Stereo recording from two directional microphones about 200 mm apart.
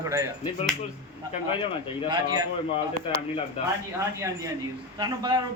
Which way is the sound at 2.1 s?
20° right (ahead or behind).